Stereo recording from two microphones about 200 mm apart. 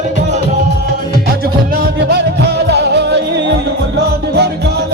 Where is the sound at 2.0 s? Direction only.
55° right (ahead or behind).